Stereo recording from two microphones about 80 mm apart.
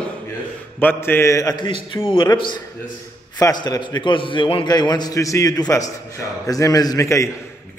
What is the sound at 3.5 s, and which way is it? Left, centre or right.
A man's voice, left.